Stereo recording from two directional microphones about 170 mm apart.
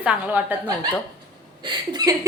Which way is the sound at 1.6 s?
25° right (ahead or behind).